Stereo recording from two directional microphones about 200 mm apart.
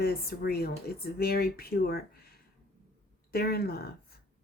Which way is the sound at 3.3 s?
50° left (ahead or behind).